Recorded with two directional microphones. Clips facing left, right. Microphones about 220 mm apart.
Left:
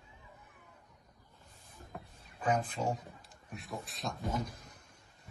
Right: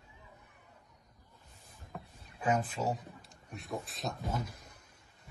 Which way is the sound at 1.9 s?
5° right (ahead or behind).